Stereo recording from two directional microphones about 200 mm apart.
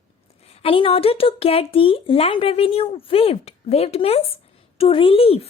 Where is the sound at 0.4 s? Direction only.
30° left (ahead or behind).